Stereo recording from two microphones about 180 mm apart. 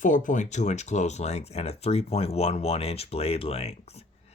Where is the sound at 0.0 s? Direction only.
45° left (ahead or behind).